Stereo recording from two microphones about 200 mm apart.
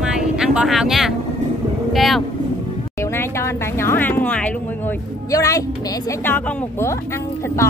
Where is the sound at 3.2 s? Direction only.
10° left (ahead or behind).